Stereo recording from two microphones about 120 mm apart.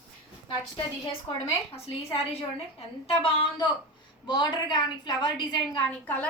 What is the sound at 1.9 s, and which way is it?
A woman's voice, 55° left (ahead or behind).